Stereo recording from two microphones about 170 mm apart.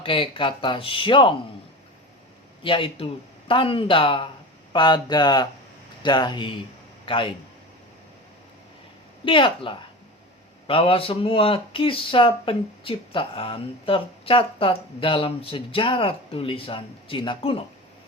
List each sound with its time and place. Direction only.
0.0 s speech: 30° left (ahead or behind)
2.6 s a man's voice: 30° left (ahead or behind)
9.2 s speech: 30° left (ahead or behind)